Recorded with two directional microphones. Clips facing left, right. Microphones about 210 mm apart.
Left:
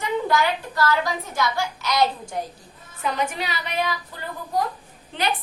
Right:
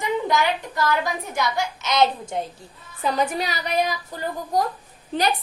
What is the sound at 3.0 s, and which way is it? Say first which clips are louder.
A woman's voice: right 3 dB; 35° right (ahead or behind).